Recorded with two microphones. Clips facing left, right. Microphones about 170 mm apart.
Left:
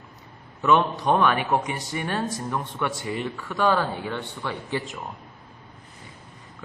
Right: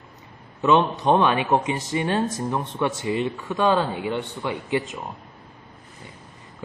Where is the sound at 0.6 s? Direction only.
15° right (ahead or behind).